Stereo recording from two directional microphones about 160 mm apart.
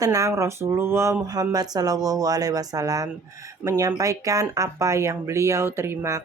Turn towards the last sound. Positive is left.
turn(degrees=-20)  # may be behind; listen again after turning